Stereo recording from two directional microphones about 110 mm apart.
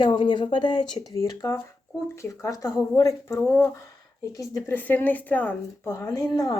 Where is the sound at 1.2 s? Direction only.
30° left (ahead or behind).